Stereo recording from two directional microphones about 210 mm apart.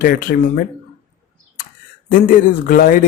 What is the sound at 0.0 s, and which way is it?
Speech, 45° left (ahead or behind).